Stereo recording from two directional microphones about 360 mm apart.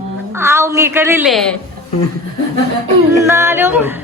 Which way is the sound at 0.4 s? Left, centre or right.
Centre.